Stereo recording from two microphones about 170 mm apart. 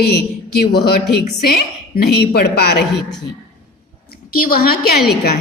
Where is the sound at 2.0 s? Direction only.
70° left (ahead or behind).